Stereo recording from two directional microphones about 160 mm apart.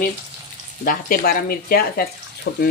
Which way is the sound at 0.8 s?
65° left (ahead or behind).